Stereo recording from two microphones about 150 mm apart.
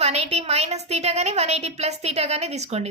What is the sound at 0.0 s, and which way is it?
A woman's voice, 45° right (ahead or behind).